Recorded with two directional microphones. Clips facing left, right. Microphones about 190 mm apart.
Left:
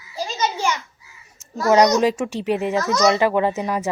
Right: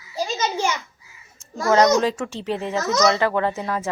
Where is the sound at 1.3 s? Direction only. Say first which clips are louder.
Left 2 dB; 15° left (ahead or behind).